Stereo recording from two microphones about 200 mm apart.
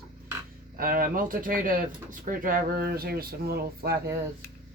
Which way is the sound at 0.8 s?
45° right (ahead or behind).